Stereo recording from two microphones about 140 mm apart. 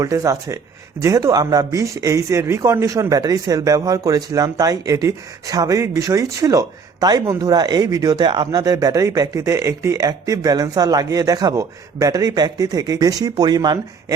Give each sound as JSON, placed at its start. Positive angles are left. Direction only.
{"t": 0.0, "sound": "speech", "side_deg": -25}